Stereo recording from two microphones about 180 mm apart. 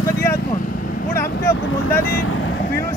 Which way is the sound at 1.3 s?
65° left (ahead or behind).